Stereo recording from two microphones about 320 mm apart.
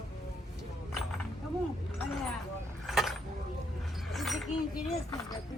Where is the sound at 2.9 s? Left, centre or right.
Centre.